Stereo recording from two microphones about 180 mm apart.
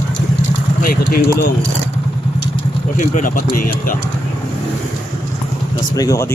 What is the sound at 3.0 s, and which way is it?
Speech, 45° left (ahead or behind).